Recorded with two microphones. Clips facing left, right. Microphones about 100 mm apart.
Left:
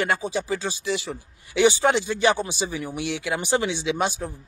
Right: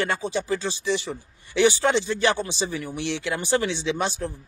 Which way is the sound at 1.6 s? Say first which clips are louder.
Left 1 dB; 15° left (ahead or behind).